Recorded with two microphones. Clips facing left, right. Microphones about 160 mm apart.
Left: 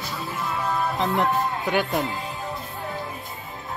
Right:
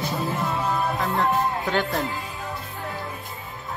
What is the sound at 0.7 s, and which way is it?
Music, centre (ahead or behind).